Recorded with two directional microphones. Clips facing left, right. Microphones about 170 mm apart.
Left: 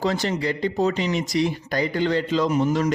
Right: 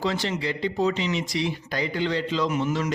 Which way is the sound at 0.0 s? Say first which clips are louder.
Left 3 dB; 45° left (ahead or behind).